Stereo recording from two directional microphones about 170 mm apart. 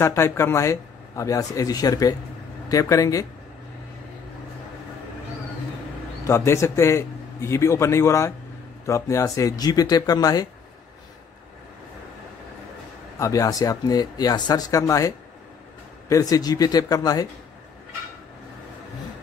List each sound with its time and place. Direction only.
0.0 s speech: 15° left (ahead or behind)
6.2 s speech: 15° left (ahead or behind)
13.2 s speech: 20° left (ahead or behind)